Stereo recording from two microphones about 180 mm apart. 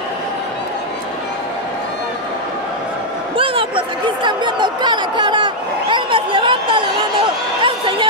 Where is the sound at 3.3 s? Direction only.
30° right (ahead or behind).